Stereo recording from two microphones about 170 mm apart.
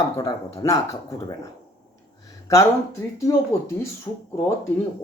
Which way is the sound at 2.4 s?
20° left (ahead or behind).